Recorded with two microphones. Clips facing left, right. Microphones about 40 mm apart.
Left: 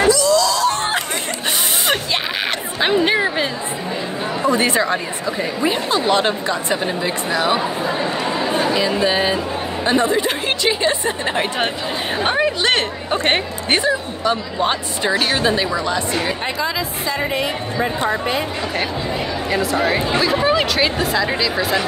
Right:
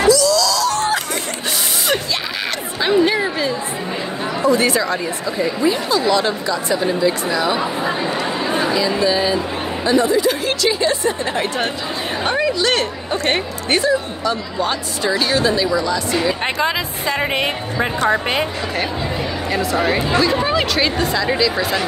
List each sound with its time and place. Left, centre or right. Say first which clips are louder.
0.0 s music: even; left
3.1 s a sound: left 1 dB; left
5.7 s speech: even; left
9.0 s speech: right 1 dB; left
17.2 s a woman's voice: right 1 dB; right
19.5 s speech: even; centre